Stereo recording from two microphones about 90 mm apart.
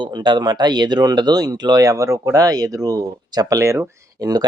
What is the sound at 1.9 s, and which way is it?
Speech, 35° right (ahead or behind).